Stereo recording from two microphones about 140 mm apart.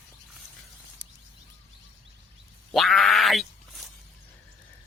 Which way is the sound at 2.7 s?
Centre (ahead or behind).